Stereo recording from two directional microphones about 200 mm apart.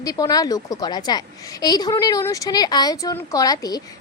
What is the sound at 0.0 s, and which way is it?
Speech, 20° left (ahead or behind).